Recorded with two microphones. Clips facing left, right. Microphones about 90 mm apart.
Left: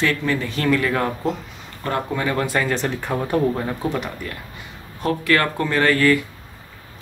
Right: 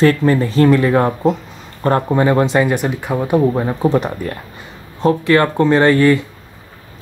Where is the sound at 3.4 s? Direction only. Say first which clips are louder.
Right 6 dB; 20° right (ahead or behind).